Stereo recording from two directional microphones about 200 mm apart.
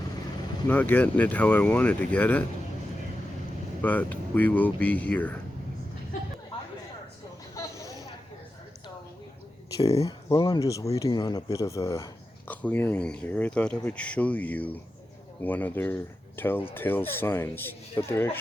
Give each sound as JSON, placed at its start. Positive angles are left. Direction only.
{"t": 0.7, "sound": "speech", "side_deg": 10}
{"t": 3.8, "sound": "speech", "side_deg": 10}
{"t": 7.5, "sound": "vehicle", "side_deg": 15}
{"t": 10.0, "sound": "speech", "side_deg": 20}